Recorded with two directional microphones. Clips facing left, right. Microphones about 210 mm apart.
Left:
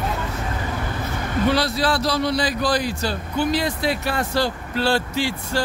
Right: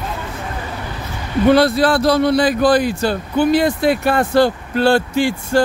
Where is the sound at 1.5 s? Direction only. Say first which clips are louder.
Right 11 dB; 55° right (ahead or behind).